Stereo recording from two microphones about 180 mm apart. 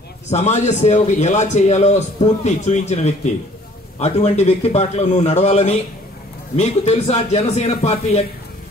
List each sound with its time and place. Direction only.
0.3 s a man's voice: 40° left (ahead or behind)